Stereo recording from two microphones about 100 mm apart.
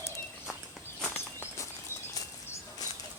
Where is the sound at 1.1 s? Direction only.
25° left (ahead or behind).